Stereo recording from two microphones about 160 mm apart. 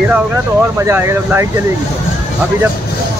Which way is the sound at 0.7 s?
15° right (ahead or behind).